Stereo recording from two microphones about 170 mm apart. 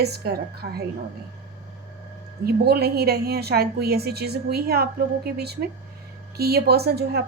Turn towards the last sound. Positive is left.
turn(degrees=-70)  # may be behind; listen again after turning